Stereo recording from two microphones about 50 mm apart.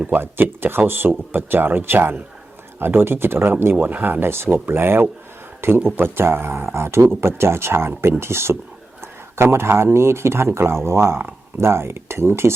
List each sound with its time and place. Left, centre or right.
0.1 s speech: right
3.8 s speech: right